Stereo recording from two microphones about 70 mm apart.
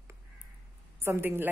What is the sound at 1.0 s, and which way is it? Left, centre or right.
Speech, right.